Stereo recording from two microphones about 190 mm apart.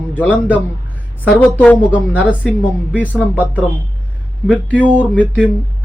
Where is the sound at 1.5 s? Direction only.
10° left (ahead or behind).